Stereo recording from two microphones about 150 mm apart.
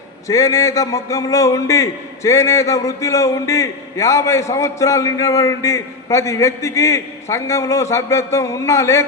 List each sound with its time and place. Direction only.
0.3 s a man's voice: 20° left (ahead or behind)